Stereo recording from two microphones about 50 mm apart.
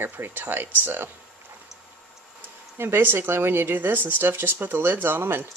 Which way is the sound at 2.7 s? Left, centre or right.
Right.